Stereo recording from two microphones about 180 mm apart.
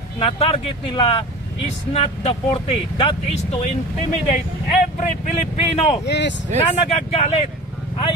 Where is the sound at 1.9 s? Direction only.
35° left (ahead or behind).